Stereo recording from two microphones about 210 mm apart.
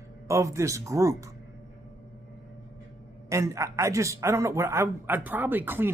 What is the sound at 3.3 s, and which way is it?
A man's voice, 15° right (ahead or behind).